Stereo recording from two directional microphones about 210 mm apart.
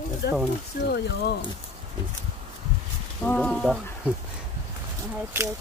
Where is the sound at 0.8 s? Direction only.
50° left (ahead or behind).